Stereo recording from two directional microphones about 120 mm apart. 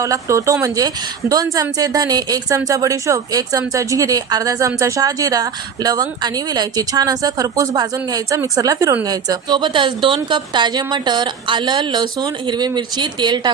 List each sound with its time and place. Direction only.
0.0 s speech: 30° right (ahead or behind)